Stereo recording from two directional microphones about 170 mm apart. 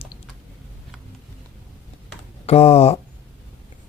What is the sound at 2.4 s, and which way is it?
Speech, 35° left (ahead or behind).